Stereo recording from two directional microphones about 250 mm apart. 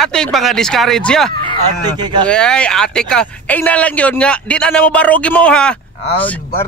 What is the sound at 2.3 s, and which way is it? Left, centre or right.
Speech, centre.